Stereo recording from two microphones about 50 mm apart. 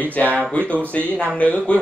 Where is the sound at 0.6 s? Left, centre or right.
Right.